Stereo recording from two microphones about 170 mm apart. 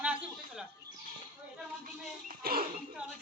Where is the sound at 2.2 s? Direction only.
60° right (ahead or behind).